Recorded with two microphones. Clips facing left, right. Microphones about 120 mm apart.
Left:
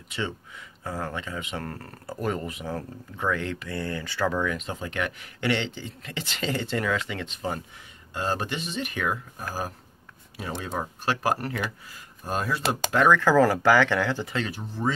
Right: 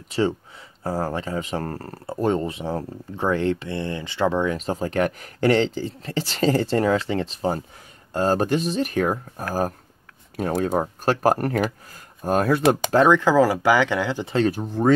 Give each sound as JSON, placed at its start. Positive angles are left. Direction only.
{"t": 0.1, "sound": "speech", "side_deg": -35}
{"t": 13.1, "sound": "speech", "side_deg": -15}
{"t": 14.2, "sound": "speech", "side_deg": -35}
{"t": 14.5, "sound": "speech", "side_deg": -55}